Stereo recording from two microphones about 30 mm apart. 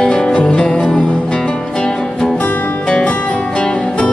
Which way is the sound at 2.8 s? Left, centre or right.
Left.